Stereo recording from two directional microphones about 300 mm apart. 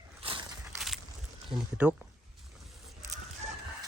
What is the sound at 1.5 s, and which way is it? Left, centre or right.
Speech, centre.